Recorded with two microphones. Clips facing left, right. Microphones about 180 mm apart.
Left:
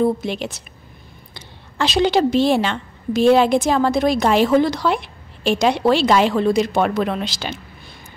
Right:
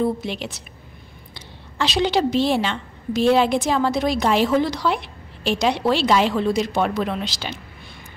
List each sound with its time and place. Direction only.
0.2 s a woman's voice: 45° left (ahead or behind)